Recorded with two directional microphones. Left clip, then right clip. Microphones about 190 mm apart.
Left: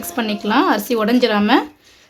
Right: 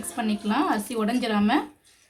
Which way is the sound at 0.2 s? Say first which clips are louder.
Left 9 dB; 40° left (ahead or behind).